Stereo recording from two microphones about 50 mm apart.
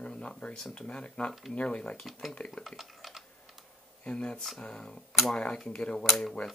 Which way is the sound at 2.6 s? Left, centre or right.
Centre.